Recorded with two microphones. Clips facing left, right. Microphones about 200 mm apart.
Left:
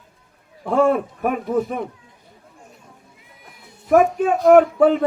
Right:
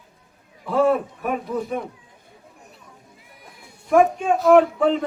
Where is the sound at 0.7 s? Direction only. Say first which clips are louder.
Left 2 dB; 55° left (ahead or behind).